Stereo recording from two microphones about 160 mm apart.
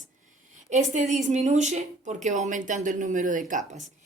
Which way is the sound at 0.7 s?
50° right (ahead or behind).